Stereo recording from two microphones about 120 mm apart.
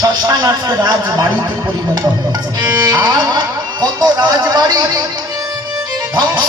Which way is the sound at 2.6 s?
35° right (ahead or behind).